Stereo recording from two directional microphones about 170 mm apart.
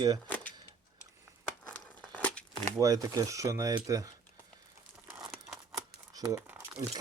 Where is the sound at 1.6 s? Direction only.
10° left (ahead or behind).